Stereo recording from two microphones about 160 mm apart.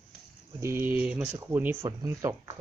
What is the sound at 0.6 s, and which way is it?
Speech, 15° right (ahead or behind).